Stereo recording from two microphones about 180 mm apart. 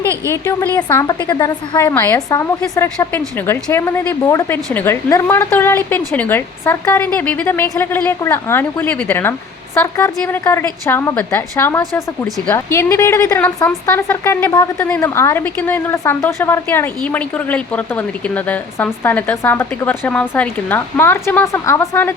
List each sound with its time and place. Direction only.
0.3 s a woman's voice: 15° left (ahead or behind)